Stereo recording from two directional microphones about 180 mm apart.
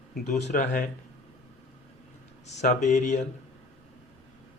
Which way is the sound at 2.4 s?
40° left (ahead or behind).